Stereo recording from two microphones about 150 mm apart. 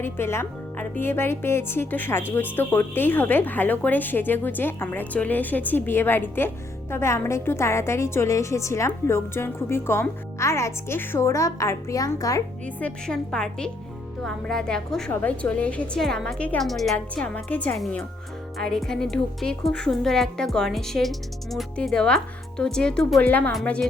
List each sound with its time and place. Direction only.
0.0 s speech: 15° left (ahead or behind)
12.6 s speech: 5° left (ahead or behind)